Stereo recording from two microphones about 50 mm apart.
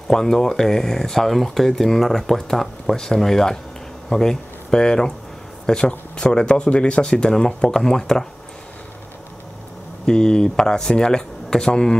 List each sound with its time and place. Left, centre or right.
0.1 s speech: centre
10.0 s speech: centre